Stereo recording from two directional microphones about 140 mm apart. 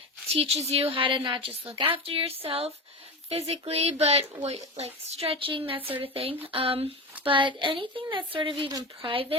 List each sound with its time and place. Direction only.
0.3 s a woman's voice: 45° right (ahead or behind)